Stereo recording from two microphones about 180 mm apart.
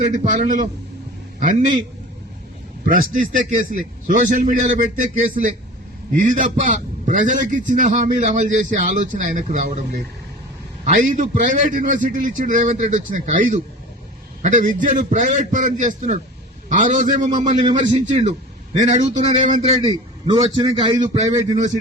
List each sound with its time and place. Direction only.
0.0 s a man's voice: 45° right (ahead or behind)
3.1 s a man's voice: 45° right (ahead or behind)
11.0 s a man's voice: 45° right (ahead or behind)
20.2 s a man's voice: 35° right (ahead or behind)